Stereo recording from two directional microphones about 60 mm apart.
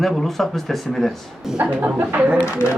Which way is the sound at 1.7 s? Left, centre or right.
Right.